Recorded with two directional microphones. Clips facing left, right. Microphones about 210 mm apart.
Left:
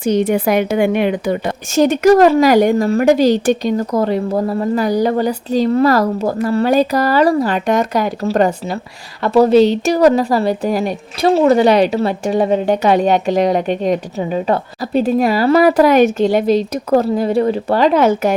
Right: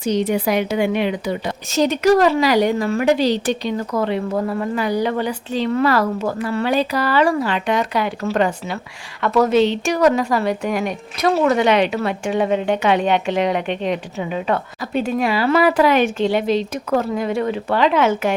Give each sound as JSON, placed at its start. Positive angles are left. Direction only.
{"t": 0.0, "sound": "a woman's voice", "side_deg": 50}